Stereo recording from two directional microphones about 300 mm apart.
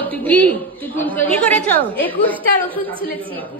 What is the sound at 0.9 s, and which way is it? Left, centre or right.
A woman's voice, centre.